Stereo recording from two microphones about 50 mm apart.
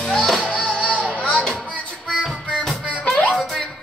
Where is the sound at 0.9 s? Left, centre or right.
Right.